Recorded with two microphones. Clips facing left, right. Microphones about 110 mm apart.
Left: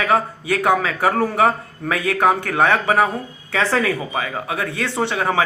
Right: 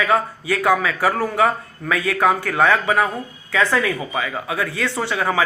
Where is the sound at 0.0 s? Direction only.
25° left (ahead or behind).